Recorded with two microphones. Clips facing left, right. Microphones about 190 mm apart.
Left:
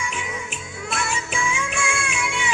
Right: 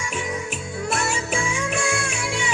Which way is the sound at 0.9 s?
45° right (ahead or behind).